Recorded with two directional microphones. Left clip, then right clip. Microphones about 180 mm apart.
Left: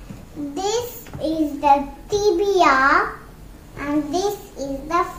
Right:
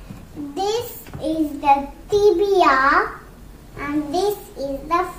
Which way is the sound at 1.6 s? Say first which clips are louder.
Left 1 dB; 20° left (ahead or behind).